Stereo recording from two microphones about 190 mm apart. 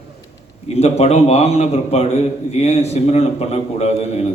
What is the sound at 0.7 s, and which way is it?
A man's voice, 35° left (ahead or behind).